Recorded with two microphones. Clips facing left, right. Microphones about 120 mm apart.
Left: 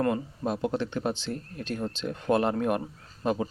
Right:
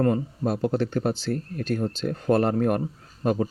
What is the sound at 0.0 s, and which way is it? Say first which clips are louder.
A man's voice: right 4 dB; 45° right (ahead or behind).